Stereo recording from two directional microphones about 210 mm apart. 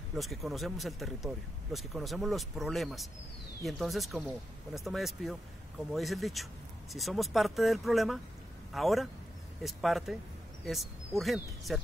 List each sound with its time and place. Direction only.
0.1 s speech: centre (ahead or behind)